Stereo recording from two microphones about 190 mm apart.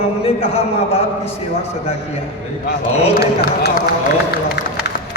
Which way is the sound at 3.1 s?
55° left (ahead or behind).